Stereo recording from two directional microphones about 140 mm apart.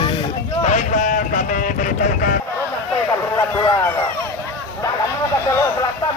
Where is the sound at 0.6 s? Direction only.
60° left (ahead or behind); by 2.4 s 75° left (ahead or behind).